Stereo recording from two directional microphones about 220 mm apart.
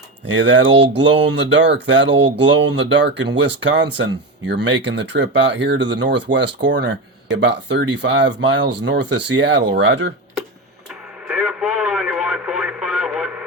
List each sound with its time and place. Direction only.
0.3 s speech: 55° right (ahead or behind)
11.3 s radio: 5° right (ahead or behind)